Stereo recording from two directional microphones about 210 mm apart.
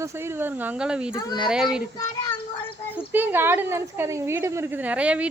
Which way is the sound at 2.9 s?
10° right (ahead or behind).